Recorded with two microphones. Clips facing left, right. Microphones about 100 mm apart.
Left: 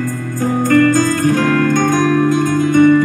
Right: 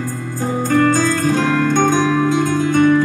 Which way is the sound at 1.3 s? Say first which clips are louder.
Left 3 dB; 20° right (ahead or behind).